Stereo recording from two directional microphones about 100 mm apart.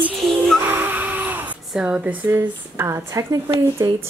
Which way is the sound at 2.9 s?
35° right (ahead or behind).